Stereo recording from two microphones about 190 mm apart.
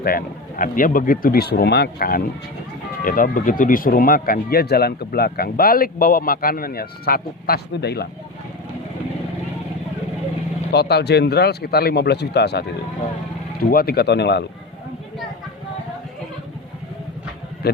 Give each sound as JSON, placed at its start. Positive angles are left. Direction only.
{"t": 0.0, "sound": "speech", "side_deg": 50}
{"t": 10.7, "sound": "a man's voice", "side_deg": 60}